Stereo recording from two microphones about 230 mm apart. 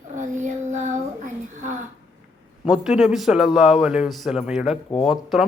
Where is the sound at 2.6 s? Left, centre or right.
Centre.